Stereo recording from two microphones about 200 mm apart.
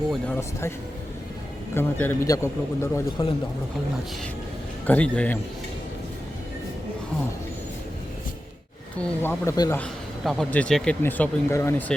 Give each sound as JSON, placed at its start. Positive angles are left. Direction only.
{"t": 1.7, "sound": "a man's voice", "side_deg": 10}
{"t": 3.2, "sound": "speech", "side_deg": 25}
{"t": 4.9, "sound": "a man's voice", "side_deg": 5}
{"t": 9.0, "sound": "a man's voice", "side_deg": 10}